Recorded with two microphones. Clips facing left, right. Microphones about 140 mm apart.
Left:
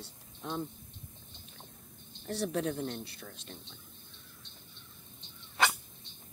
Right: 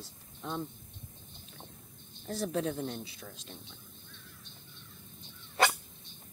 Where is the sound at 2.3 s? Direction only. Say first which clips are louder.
Even; centre (ahead or behind).